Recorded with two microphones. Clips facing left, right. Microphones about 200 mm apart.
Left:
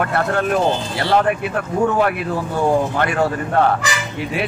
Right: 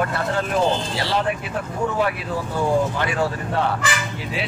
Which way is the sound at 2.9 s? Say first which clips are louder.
Left 4 dB; 55° left (ahead or behind).